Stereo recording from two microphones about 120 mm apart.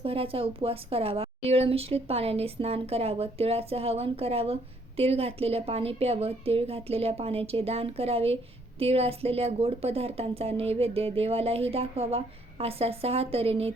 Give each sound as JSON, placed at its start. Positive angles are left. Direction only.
{"t": 0.0, "sound": "speech", "side_deg": -50}